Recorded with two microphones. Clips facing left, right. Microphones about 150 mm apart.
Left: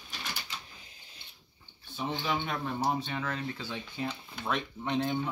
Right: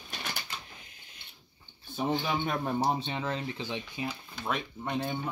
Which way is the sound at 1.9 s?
40° right (ahead or behind).